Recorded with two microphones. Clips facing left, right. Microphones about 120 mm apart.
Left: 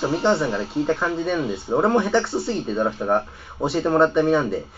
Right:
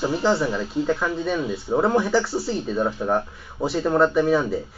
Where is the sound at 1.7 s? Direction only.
15° left (ahead or behind).